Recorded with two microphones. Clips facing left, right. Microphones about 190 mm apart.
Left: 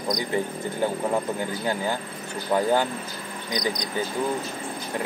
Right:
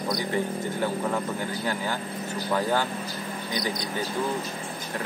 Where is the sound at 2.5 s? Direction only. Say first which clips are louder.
Left 4 dB; 15° left (ahead or behind).